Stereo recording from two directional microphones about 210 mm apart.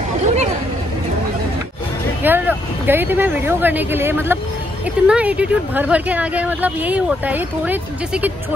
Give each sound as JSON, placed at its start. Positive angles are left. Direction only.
{"t": 2.2, "sound": "speech", "side_deg": -10}